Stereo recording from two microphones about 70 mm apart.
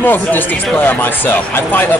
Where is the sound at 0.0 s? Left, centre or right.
Left.